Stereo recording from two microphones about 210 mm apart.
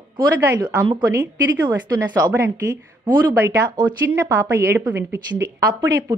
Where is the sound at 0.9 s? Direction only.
20° right (ahead or behind).